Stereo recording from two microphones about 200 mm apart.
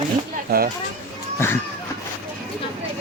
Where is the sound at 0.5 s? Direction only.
50° right (ahead or behind).